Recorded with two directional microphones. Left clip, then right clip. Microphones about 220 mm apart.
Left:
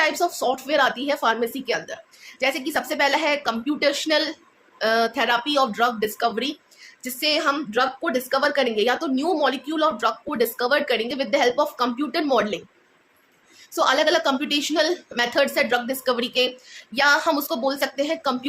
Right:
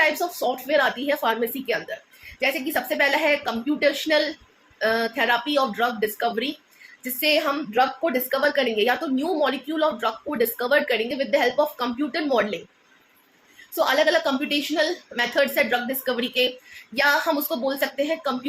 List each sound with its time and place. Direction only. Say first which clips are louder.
0.0 s a woman's voice: even; 15° left (ahead or behind)
13.7 s a woman's voice: left 1 dB; 15° left (ahead or behind)